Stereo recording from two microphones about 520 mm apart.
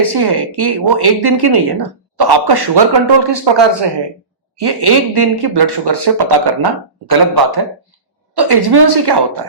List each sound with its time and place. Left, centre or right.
0.0 s speech: right